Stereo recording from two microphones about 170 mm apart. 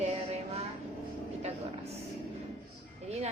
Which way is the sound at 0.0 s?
40° right (ahead or behind).